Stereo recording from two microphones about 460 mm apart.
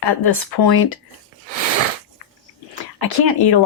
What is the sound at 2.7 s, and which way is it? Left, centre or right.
Speech, left.